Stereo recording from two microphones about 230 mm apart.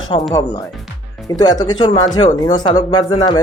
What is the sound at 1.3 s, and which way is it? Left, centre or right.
Speech, centre.